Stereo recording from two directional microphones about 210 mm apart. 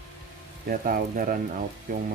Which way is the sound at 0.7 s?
40° right (ahead or behind).